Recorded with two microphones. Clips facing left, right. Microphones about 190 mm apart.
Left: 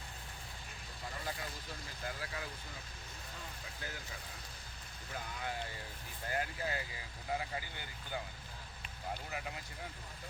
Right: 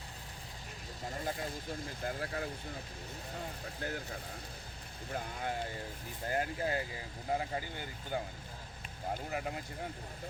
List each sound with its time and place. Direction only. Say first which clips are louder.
1.0 s vehicle: right 5 dB; 45° right (ahead or behind)
1.5 s speech: right 7 dB; 50° right (ahead or behind)
3.8 s speech: right 8 dB; 55° right (ahead or behind)